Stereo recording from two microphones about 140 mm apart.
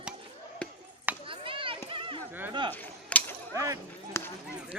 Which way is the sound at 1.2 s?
40° right (ahead or behind).